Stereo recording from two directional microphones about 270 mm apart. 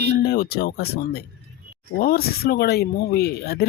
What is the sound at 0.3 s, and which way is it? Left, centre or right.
Speech, left.